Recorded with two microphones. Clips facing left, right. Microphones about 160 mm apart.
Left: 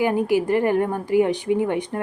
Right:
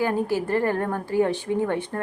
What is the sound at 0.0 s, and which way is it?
A woman's voice, 15° left (ahead or behind).